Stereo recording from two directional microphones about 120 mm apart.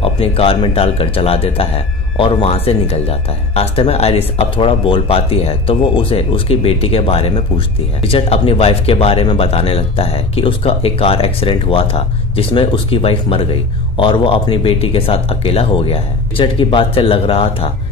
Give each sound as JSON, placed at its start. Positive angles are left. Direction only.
{"t": 0.0, "sound": "speech", "side_deg": 50}